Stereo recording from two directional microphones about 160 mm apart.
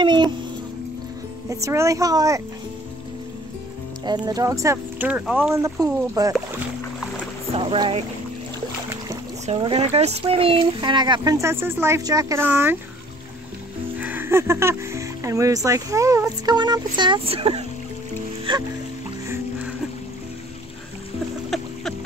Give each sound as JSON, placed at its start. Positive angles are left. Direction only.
{"t": 0.0, "sound": "speech", "side_deg": -30}
{"t": 1.5, "sound": "speech", "side_deg": -20}
{"t": 4.0, "sound": "speech", "side_deg": -25}
{"t": 5.5, "sound": "speech", "side_deg": -20}
{"t": 7.5, "sound": "speech", "side_deg": -35}
{"t": 9.5, "sound": "speech", "side_deg": -35}
{"t": 13.9, "sound": "speech", "side_deg": -10}